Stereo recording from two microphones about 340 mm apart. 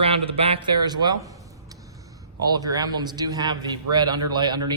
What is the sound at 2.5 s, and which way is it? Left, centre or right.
A man's voice, centre.